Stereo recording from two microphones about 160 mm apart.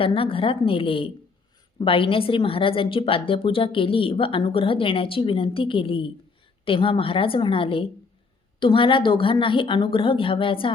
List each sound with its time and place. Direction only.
0.0 s a woman's voice: 35° left (ahead or behind)